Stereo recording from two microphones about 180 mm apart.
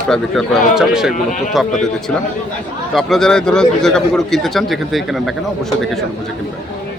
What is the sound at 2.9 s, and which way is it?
A man's voice, centre (ahead or behind).